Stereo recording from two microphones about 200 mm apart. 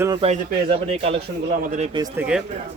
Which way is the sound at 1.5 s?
40° right (ahead or behind).